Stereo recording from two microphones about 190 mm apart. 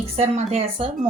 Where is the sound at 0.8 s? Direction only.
30° right (ahead or behind).